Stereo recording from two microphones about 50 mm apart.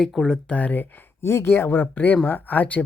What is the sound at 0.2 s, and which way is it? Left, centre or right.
Speech, centre.